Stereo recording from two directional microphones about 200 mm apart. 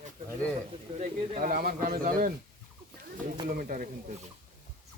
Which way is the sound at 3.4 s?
45° right (ahead or behind).